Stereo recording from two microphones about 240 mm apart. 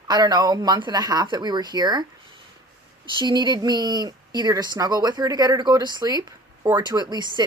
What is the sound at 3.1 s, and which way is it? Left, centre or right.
Speech, centre.